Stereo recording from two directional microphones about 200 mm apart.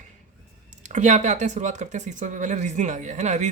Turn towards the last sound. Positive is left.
turn(degrees=-35)  # may be behind; listen again after turning